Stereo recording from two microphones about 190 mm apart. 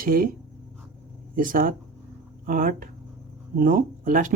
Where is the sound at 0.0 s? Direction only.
50° right (ahead or behind).